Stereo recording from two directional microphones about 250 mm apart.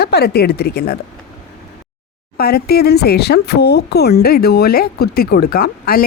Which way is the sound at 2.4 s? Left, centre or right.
Left.